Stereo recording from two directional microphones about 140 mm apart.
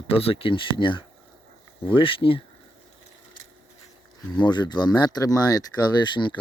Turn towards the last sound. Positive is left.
turn(degrees=35)  # may be behind; listen again after turning